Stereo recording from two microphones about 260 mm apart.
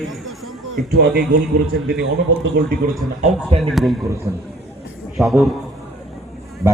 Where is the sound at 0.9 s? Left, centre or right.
Right.